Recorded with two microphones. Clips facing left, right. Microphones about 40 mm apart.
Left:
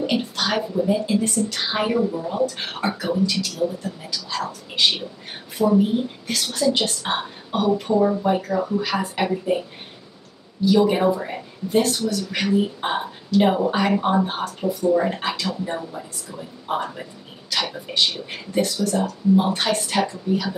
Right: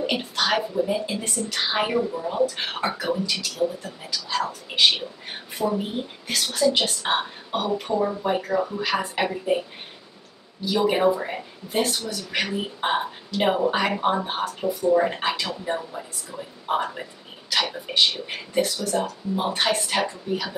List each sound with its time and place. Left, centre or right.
0.0 s speech: centre
10.6 s speech: centre